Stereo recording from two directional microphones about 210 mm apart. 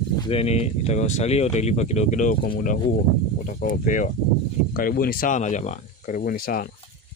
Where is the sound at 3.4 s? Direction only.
40° left (ahead or behind).